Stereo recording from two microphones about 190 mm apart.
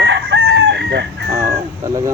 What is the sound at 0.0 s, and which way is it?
Chicken, 70° right (ahead or behind).